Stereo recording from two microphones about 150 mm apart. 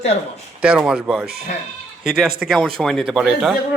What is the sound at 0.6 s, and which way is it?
Speech, 10° right (ahead or behind).